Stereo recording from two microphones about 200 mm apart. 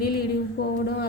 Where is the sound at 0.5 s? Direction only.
50° left (ahead or behind).